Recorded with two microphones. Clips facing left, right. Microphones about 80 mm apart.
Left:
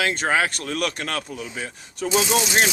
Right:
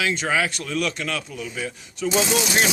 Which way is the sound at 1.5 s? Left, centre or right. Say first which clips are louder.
Right 2 dB; left.